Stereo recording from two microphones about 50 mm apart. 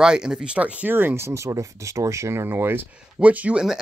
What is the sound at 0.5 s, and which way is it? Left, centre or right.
Speech, right.